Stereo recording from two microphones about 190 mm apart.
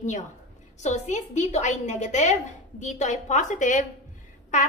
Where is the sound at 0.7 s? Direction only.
40° left (ahead or behind).